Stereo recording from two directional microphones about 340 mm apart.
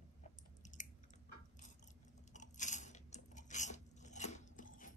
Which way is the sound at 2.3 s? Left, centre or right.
Left.